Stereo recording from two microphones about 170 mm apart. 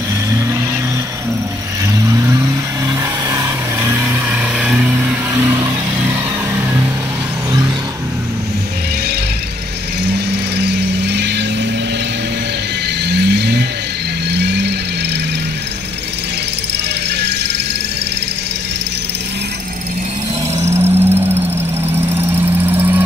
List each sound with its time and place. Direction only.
2.0 s vehicle: 20° right (ahead or behind)
10.0 s vehicle: 80° right
13.0 s vehicle: 80° right
20.5 s music: 15° right (ahead or behind)
21.9 s vehicle: 15° right (ahead or behind)